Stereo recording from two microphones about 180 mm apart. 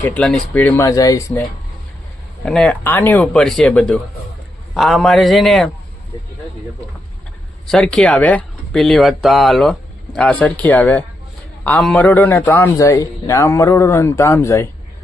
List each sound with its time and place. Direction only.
0.0 s a man's voice: 5° left (ahead or behind)
2.4 s speech: 5° left (ahead or behind)
7.7 s a man's voice: 5° left (ahead or behind)